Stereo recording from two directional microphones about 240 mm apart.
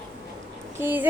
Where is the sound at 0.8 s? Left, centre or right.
Centre.